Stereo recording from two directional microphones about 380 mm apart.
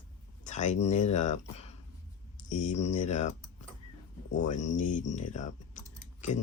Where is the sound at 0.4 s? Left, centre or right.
Centre.